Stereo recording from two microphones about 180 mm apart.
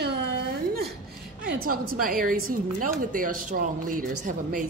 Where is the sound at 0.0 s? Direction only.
65° right (ahead or behind).